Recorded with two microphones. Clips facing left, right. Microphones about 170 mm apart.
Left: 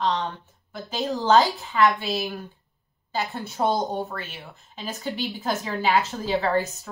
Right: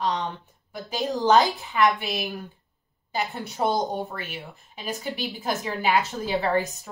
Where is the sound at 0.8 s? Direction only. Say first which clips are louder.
Even; 15° right (ahead or behind).